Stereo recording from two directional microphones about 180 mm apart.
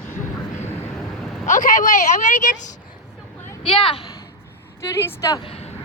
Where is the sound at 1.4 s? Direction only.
45° left (ahead or behind).